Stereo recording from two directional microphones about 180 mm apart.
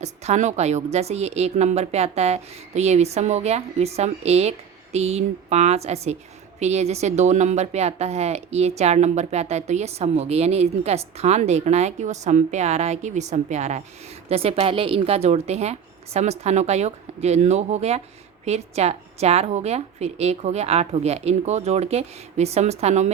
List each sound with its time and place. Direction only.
0.0 s a woman's voice: 40° right (ahead or behind)